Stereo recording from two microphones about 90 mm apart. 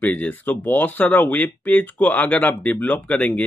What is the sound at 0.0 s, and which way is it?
Speech, 20° left (ahead or behind).